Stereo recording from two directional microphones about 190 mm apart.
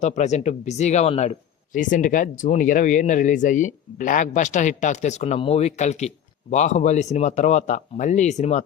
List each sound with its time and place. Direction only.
0.0 s speech: 35° left (ahead or behind)